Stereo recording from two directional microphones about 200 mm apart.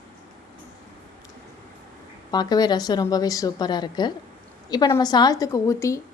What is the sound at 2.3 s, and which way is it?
A woman's voice, 20° left (ahead or behind).